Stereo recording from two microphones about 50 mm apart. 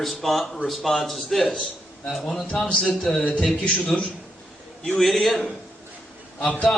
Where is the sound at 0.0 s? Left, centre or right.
Centre.